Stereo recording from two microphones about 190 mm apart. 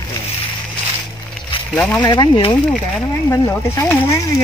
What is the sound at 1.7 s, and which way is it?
Speech, 5° left (ahead or behind).